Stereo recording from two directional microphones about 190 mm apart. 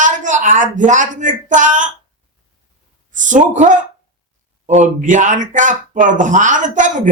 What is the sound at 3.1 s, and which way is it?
Speech, 40° right (ahead or behind).